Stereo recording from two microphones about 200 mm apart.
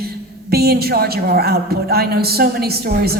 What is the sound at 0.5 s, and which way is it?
A woman's voice, 50° right (ahead or behind).